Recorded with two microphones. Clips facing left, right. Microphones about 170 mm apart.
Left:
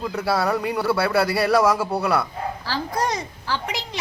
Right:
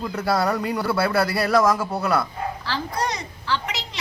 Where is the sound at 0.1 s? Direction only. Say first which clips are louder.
Even; centre (ahead or behind).